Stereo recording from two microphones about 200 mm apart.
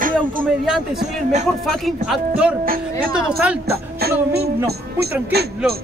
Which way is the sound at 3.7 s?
50° right (ahead or behind).